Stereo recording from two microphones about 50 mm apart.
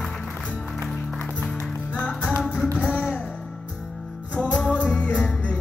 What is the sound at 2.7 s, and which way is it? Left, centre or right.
Music, right.